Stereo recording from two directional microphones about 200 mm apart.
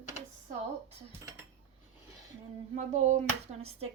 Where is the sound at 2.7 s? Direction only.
35° right (ahead or behind).